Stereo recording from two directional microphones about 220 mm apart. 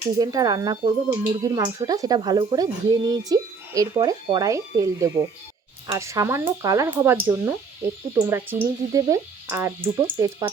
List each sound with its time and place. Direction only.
0.2 s speech: 15° right (ahead or behind)